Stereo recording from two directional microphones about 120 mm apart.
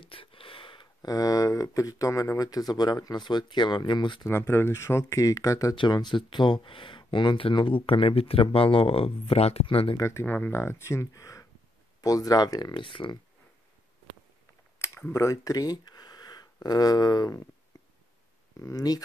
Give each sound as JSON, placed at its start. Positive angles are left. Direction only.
{"t": 0.0, "sound": "a sound", "side_deg": 50}
{"t": 1.0, "sound": "speech", "side_deg": 30}
{"t": 4.3, "sound": "speech", "side_deg": 20}
{"t": 5.8, "sound": "speech", "side_deg": 40}
{"t": 9.9, "sound": "speech", "side_deg": 25}
{"t": 12.7, "sound": "speech", "side_deg": 45}
{"t": 14.8, "sound": "a sound", "side_deg": 20}
{"t": 15.2, "sound": "speech", "side_deg": 30}
{"t": 18.6, "sound": "speech", "side_deg": 30}